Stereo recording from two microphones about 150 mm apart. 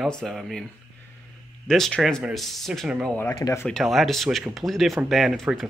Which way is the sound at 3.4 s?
20° left (ahead or behind).